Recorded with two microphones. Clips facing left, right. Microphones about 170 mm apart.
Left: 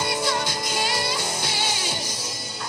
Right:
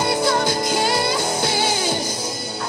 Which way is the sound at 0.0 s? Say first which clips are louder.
Right 6 dB; 50° right (ahead or behind).